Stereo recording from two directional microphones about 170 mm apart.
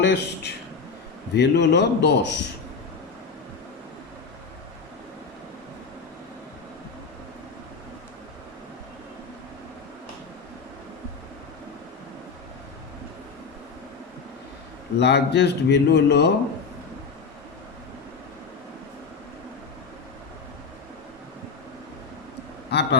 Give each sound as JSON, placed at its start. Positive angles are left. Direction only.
{"t": 0.0, "sound": "a man's voice", "side_deg": 80}
{"t": 14.9, "sound": "speech", "side_deg": 80}
{"t": 22.7, "sound": "a sound", "side_deg": 80}